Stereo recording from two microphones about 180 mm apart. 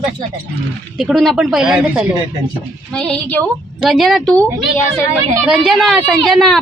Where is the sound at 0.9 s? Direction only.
Centre (ahead or behind).